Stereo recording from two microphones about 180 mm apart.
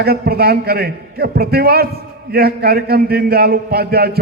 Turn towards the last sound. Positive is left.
turn(degrees=-60)  # may be behind; listen again after turning